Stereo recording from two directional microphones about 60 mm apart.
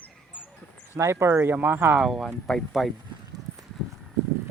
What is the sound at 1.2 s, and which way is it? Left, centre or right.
Speech, right.